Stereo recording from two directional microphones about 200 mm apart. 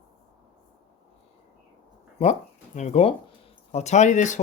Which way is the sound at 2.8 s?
35° left (ahead or behind).